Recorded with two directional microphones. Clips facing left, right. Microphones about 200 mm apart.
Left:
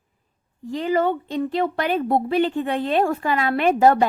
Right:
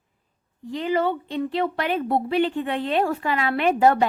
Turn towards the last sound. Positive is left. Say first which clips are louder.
# left 2 dB
turn(degrees=40)  # may be behind; listen again after turning